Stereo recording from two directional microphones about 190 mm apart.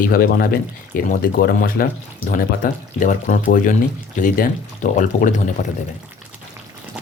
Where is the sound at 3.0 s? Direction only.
40° left (ahead or behind).